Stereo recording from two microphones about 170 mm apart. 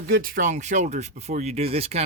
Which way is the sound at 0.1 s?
55° right (ahead or behind).